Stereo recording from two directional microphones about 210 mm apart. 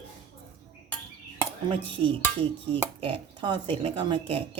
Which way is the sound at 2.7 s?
25° right (ahead or behind).